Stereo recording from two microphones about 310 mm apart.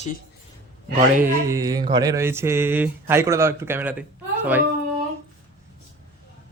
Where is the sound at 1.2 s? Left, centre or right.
Centre.